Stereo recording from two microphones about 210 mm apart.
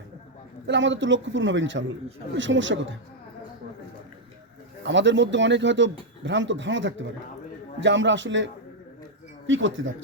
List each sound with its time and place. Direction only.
0.7 s speech: 60° right (ahead or behind)
4.8 s speech: 60° right (ahead or behind)
9.5 s speech: 65° right (ahead or behind)